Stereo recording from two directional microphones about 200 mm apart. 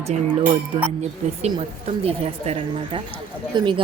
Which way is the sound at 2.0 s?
30° right (ahead or behind).